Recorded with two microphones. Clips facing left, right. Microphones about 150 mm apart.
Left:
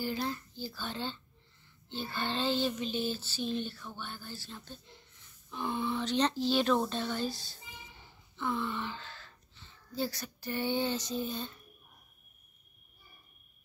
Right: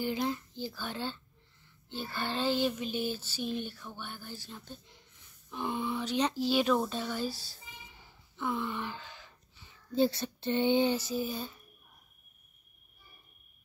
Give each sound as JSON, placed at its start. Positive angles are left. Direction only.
{"t": 0.0, "sound": "speech", "side_deg": -15}
{"t": 11.0, "sound": "speech", "side_deg": -5}